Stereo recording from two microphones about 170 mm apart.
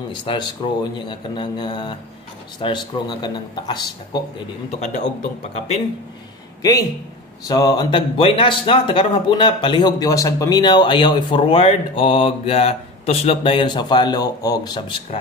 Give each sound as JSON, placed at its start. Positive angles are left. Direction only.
{"t": 0.1, "sound": "speech", "side_deg": 25}
{"t": 4.6, "sound": "a man's voice", "side_deg": 40}
{"t": 6.6, "sound": "speech", "side_deg": 20}